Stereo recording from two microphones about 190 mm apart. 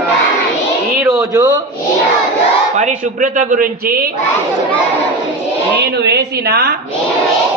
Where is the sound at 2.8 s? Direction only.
45° right (ahead or behind).